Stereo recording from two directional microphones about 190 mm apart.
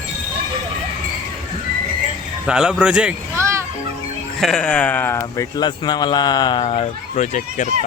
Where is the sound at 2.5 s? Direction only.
5° right (ahead or behind).